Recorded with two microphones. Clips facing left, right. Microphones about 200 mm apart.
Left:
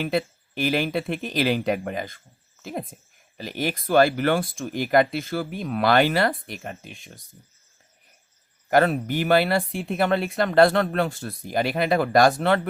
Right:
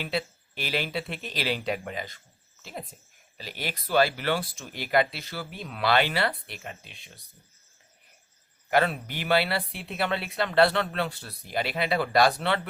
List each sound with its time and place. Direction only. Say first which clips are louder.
0.0 s speech: left 6 dB; 50° left (ahead or behind)
8.7 s speech: left 5 dB; 45° left (ahead or behind)